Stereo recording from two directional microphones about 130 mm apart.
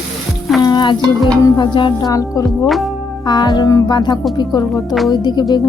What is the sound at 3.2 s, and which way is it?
Speech, 35° left (ahead or behind).